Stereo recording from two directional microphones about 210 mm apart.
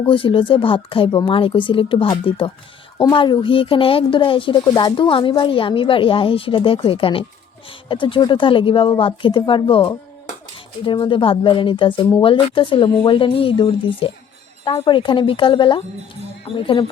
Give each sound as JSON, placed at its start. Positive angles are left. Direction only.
{"t": 0.0, "sound": "speech", "side_deg": 25}